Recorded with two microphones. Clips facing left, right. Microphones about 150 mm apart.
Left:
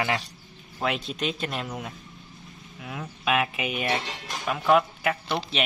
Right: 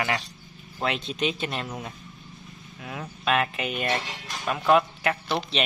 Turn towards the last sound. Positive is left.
turn(degrees=0)  # may be behind; listen again after turning